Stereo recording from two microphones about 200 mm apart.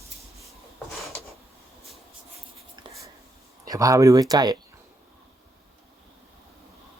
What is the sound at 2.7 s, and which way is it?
Writing, 25° right (ahead or behind).